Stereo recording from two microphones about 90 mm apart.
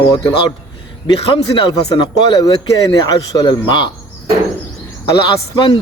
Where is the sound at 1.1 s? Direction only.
75° left (ahead or behind).